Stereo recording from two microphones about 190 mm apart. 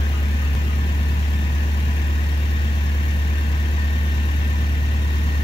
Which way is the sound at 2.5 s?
25° left (ahead or behind).